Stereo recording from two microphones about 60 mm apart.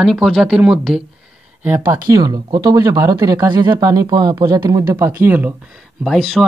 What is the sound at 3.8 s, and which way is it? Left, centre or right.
Speech, right.